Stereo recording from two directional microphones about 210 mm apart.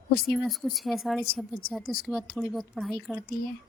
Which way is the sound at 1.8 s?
45° left (ahead or behind).